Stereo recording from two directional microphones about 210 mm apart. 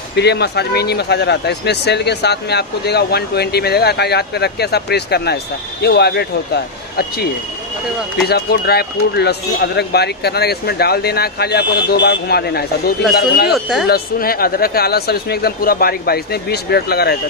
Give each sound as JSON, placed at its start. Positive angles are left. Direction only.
{"t": 0.1, "sound": "speech", "side_deg": 50}
{"t": 8.3, "sound": "speech", "side_deg": 50}
{"t": 13.5, "sound": "speech", "side_deg": 0}
{"t": 13.8, "sound": "speech", "side_deg": 45}